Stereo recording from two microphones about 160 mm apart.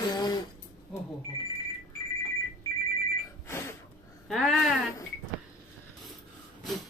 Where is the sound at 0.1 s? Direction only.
25° left (ahead or behind).